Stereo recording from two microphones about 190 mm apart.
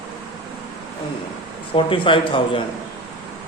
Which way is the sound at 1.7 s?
25° left (ahead or behind).